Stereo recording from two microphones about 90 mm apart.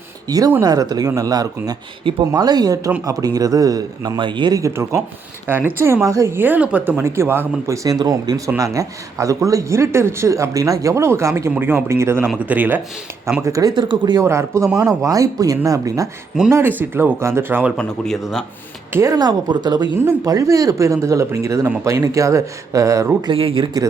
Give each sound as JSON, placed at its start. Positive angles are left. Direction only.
{"t": 0.3, "sound": "speech", "side_deg": -45}
{"t": 4.2, "sound": "speech", "side_deg": -60}
{"t": 4.5, "sound": "speech", "side_deg": -35}
{"t": 5.5, "sound": "speech", "side_deg": -25}
{"t": 7.9, "sound": "speech", "side_deg": -45}
{"t": 13.4, "sound": "speech", "side_deg": -40}
{"t": 13.7, "sound": "speech", "side_deg": -60}
{"t": 14.2, "sound": "speech", "side_deg": -30}
{"t": 16.5, "sound": "speech", "side_deg": -25}
{"t": 17.7, "sound": "speech", "side_deg": 5}
{"t": 19.1, "sound": "speech", "side_deg": -50}
{"t": 20.2, "sound": "speech", "side_deg": -40}
{"t": 23.3, "sound": "speech", "side_deg": -85}